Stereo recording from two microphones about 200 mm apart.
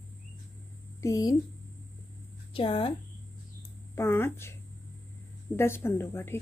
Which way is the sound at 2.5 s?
25° left (ahead or behind).